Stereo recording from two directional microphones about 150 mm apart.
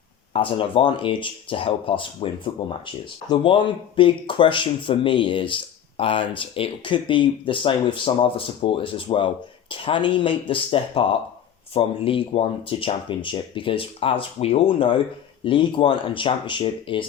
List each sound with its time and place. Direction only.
0.3 s speech: 35° left (ahead or behind)